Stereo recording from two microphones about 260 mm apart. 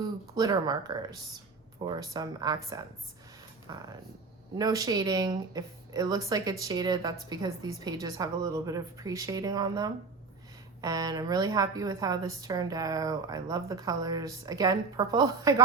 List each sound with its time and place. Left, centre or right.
0.3 s speech: centre